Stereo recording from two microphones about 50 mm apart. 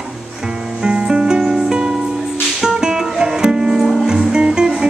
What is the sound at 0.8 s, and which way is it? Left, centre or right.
Music, centre.